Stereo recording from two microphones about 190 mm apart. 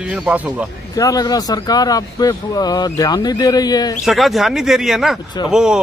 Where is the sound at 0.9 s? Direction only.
20° left (ahead or behind).